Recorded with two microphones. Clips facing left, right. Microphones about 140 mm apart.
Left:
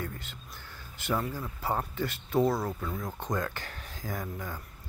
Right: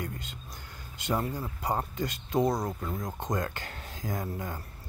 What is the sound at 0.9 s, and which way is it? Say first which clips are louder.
Speech: right 1 dB; 20° right (ahead or behind).